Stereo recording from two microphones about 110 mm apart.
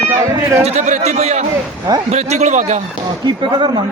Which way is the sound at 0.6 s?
85° right.